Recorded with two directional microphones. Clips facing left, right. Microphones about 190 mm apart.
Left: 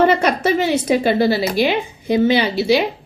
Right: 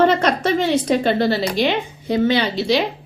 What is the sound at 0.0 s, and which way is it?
Speech, 10° left (ahead or behind).